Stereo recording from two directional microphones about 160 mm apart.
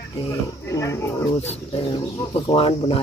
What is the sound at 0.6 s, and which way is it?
Speech, 20° left (ahead or behind).